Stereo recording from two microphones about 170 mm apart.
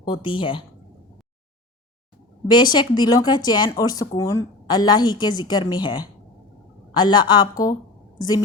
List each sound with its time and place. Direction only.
0.0 s a woman's voice: 30° left (ahead or behind)
2.7 s a woman's voice: 25° left (ahead or behind)